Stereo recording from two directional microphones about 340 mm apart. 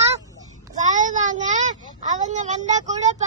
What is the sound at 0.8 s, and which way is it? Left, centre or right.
Speech, right.